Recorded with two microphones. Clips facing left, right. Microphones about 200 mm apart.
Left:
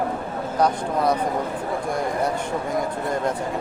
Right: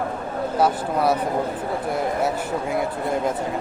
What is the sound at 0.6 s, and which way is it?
Speech, 5° right (ahead or behind).